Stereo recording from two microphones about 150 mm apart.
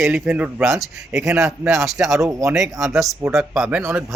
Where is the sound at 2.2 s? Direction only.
20° right (ahead or behind).